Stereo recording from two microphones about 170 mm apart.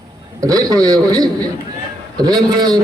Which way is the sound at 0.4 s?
20° right (ahead or behind).